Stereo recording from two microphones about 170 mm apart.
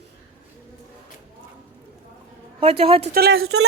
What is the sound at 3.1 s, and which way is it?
Speech, 65° right (ahead or behind).